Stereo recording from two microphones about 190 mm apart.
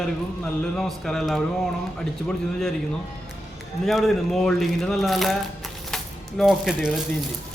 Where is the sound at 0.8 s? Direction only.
Centre (ahead or behind).